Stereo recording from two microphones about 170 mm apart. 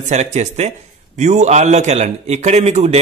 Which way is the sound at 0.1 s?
40° right (ahead or behind).